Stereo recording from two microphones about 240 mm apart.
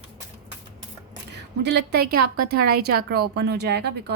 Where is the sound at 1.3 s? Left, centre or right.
Right.